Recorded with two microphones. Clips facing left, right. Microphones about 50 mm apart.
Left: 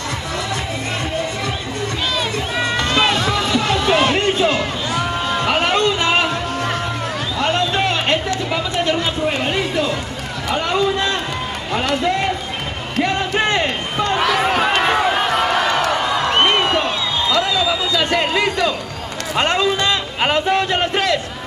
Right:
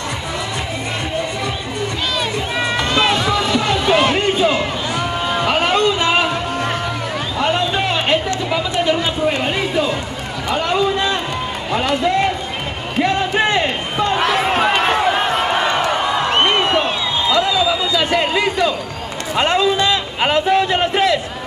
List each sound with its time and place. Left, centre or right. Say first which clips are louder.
2.1 s run: right 1 dB; centre
7.4 s a sound: even; centre
11.9 s run: right 2 dB; centre
13.0 s a sound: right 2 dB; centre
14.6 s run: right 1 dB; centre
15.2 s music: even; centre
16.3 s music: left 1 dB; centre
16.7 s music: right 1 dB; centre
17.5 s a sound: right 2 dB; centre
19.8 s music: right 1 dB; centre